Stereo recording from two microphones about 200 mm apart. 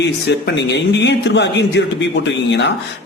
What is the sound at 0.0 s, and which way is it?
Speech, 60° left (ahead or behind).